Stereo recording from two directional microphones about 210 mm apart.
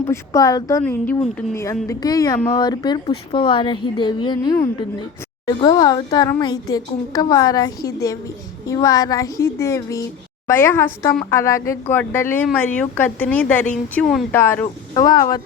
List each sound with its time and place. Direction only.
0.0 s speech: 15° left (ahead or behind)